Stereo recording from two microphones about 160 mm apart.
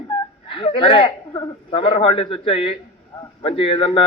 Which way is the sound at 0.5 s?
35° left (ahead or behind).